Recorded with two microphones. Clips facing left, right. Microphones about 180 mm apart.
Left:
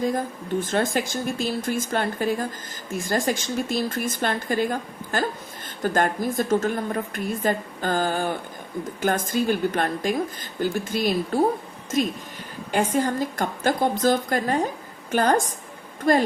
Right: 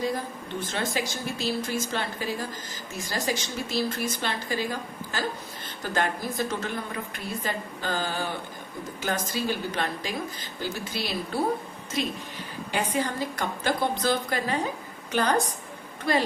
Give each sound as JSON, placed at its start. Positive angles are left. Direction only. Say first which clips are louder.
{"t": 0.6, "sound": "a woman's voice", "louder": "left 5 dB", "side_deg": 50}